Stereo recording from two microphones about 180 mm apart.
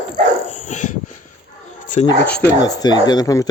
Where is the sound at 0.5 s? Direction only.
40° left (ahead or behind).